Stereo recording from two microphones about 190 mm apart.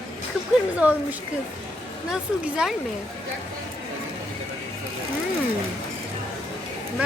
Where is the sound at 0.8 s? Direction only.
10° right (ahead or behind).